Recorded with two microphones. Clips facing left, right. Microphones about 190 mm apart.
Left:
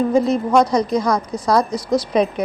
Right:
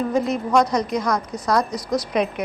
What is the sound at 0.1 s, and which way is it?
A woman's voice, 30° left (ahead or behind).